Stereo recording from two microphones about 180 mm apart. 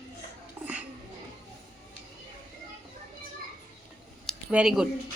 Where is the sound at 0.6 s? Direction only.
10° right (ahead or behind).